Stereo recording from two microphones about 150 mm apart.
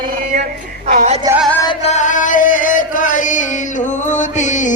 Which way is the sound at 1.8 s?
50° left (ahead or behind).